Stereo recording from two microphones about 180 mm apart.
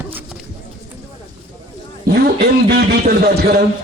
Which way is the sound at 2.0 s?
65° right (ahead or behind).